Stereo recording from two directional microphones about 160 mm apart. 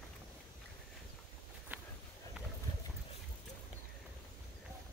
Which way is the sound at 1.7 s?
10° right (ahead or behind).